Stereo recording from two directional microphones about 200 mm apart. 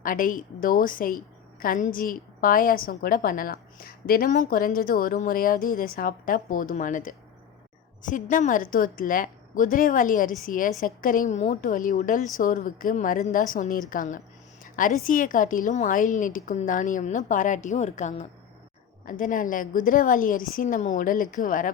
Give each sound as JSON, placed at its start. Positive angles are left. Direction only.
{"t": 0.0, "sound": "a woman's voice", "side_deg": 45}